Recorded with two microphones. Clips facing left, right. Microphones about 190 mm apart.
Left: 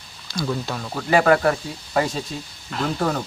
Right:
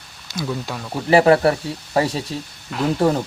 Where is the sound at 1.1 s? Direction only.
30° right (ahead or behind).